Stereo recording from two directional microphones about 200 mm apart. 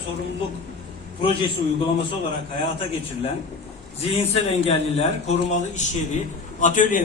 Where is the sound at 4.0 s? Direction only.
30° left (ahead or behind).